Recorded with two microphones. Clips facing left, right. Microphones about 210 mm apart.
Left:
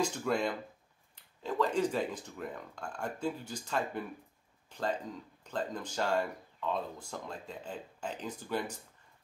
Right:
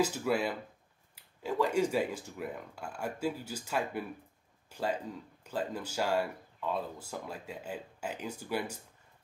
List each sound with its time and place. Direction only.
0.0 s speech: 5° right (ahead or behind)